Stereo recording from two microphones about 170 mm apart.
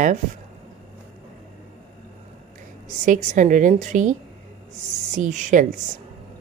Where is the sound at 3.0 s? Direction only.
50° right (ahead or behind).